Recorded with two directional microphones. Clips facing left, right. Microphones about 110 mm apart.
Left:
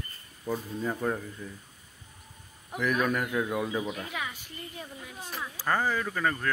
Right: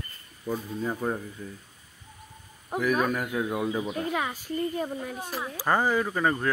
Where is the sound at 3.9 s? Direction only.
40° right (ahead or behind).